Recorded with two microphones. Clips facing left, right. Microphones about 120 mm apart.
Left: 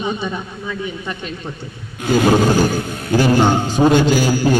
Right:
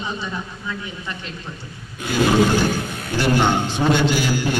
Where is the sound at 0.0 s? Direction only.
60° left (ahead or behind).